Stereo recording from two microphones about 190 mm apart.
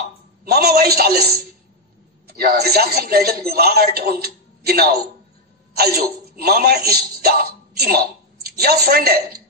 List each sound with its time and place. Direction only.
0.5 s a man's voice: 55° right (ahead or behind)